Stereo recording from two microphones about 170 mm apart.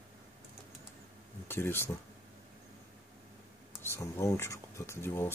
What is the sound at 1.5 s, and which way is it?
Speech, 15° left (ahead or behind).